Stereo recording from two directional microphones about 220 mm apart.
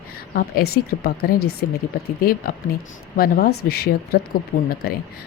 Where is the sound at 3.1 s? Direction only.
45° left (ahead or behind).